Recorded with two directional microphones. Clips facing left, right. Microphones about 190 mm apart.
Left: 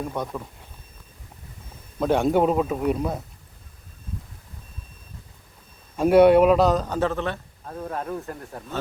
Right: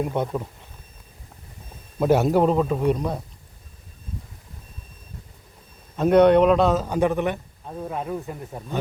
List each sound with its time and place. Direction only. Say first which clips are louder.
0.0 s speech: right 4 dB; 20° right (ahead or behind)
2.0 s a man's voice: right 2 dB; 5° right (ahead or behind)
6.0 s a man's voice: left 1 dB; 10° left (ahead or behind)